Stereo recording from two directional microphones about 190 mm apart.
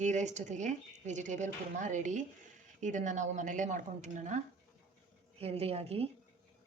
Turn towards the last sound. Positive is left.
turn(degrees=-30)  # may be behind; listen again after turning